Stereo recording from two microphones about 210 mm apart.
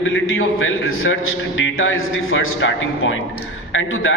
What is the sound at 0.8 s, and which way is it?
A man's voice, 75° left (ahead or behind).